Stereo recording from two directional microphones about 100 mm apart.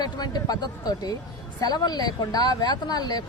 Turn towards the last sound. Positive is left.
turn(degrees=40)  # may be behind; listen again after turning